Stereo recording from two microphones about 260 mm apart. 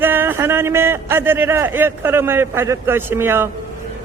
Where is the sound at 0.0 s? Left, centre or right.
Centre.